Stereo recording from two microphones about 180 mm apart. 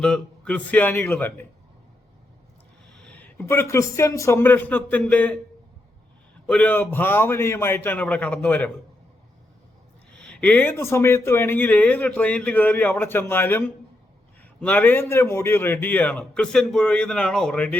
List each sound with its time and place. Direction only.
0.0 s speech: 5° left (ahead or behind)
3.0 s speech: 10° left (ahead or behind)
6.5 s speech: 10° left (ahead or behind)
10.1 s speech: 5° left (ahead or behind)